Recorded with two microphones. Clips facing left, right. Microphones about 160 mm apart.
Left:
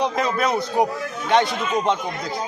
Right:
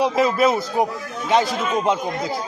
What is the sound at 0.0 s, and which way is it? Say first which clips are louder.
A man's voice: right 4 dB; 5° right (ahead or behind).